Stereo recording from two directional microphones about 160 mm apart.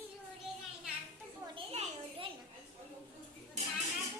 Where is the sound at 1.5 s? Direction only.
40° right (ahead or behind).